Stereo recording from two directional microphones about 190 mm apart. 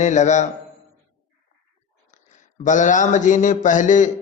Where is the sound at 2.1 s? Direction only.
40° left (ahead or behind).